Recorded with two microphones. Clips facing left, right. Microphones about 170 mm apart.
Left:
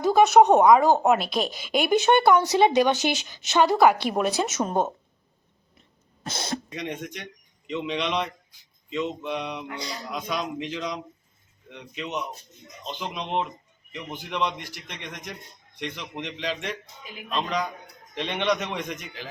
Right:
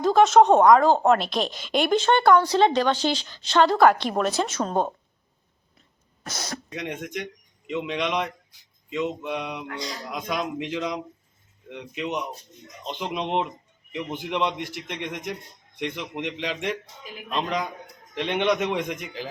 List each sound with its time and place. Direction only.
0.0 s a woman's voice: 10° left (ahead or behind)
4.5 s a woman's voice: 15° left (ahead or behind)
6.2 s speech: 25° left (ahead or behind)
6.7 s a man's voice: 10° right (ahead or behind)
14.6 s a man's voice: 60° right (ahead or behind)
15.0 s speech: 20° right (ahead or behind)